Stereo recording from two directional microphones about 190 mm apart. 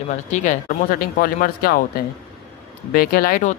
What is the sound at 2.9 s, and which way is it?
Speech, 50° left (ahead or behind).